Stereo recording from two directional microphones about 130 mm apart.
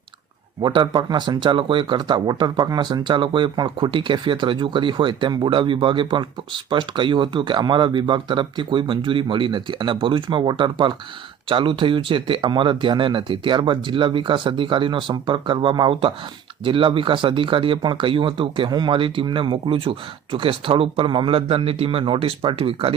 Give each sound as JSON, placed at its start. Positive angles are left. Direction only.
{"t": 0.6, "sound": "speech", "side_deg": -35}